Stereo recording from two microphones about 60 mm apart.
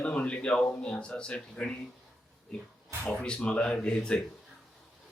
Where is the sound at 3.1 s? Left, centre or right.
Centre.